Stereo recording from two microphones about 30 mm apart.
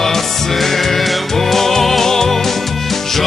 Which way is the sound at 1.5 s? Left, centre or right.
Centre.